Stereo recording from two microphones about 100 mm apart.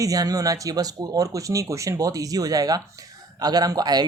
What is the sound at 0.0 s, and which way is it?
Speech, 35° right (ahead or behind).